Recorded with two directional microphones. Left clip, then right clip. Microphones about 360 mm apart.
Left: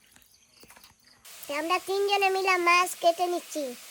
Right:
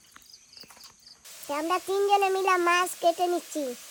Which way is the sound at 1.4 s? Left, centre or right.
Centre.